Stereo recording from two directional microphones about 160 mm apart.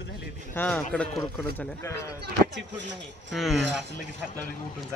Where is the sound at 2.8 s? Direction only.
90° right.